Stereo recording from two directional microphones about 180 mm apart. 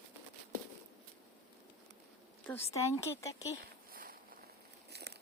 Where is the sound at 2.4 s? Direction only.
15° left (ahead or behind).